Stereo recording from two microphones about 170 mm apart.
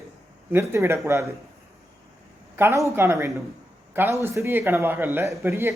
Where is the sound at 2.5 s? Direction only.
15° right (ahead or behind).